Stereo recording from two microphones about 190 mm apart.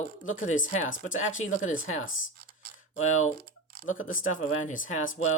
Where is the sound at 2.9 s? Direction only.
40° left (ahead or behind).